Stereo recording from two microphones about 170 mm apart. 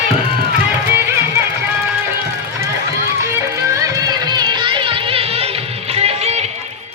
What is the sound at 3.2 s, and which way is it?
Music, 15° right (ahead or behind).